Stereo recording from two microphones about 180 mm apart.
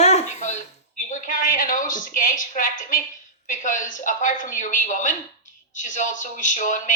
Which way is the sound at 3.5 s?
45° left (ahead or behind).